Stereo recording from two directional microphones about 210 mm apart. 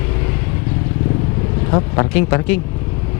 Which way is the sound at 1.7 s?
20° left (ahead or behind).